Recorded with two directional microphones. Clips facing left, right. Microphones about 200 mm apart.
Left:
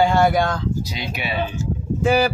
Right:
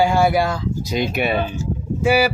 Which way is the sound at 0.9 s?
50° right (ahead or behind).